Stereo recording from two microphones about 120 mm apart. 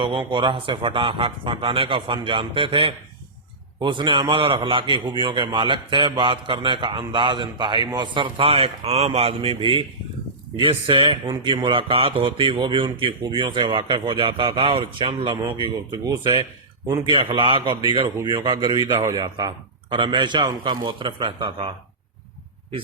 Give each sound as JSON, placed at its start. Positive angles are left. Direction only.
{"t": 0.0, "sound": "a man's voice", "side_deg": -45}